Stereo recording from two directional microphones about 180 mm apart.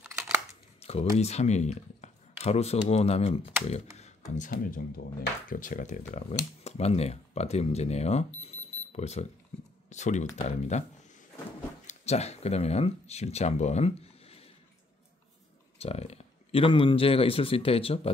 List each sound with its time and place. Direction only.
0.7 s speech: 35° left (ahead or behind)
4.4 s speech: 50° left (ahead or behind)
11.8 s speech: 40° left (ahead or behind)
15.8 s speech: 35° left (ahead or behind)